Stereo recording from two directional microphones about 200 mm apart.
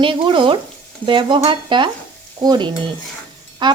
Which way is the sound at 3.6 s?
20° right (ahead or behind).